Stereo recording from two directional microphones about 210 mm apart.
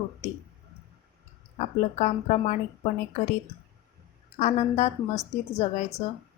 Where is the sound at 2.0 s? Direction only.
30° left (ahead or behind).